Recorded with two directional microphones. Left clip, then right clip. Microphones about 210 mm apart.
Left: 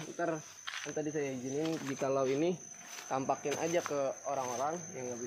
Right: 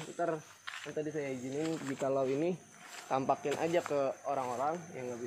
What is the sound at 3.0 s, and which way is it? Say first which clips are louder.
Speech: right 2 dB; 35° right (ahead or behind).